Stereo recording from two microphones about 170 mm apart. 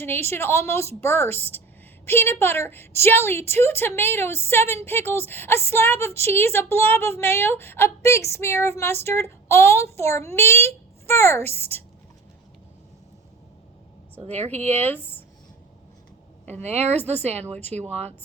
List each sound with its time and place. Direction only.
0.0 s a woman's voice: 15° left (ahead or behind)
14.3 s speech: 40° right (ahead or behind)
14.7 s a woman's voice: 10° left (ahead or behind)
16.5 s speech: 40° right (ahead or behind)
17.0 s a woman's voice: 10° left (ahead or behind)